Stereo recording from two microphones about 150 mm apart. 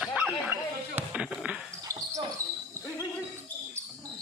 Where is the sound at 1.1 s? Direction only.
5° right (ahead or behind).